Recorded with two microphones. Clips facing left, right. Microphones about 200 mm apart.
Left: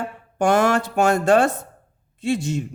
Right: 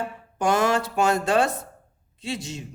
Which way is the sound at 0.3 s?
55° left (ahead or behind).